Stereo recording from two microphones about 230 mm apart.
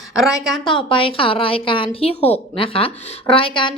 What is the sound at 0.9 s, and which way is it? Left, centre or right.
A woman's voice, left.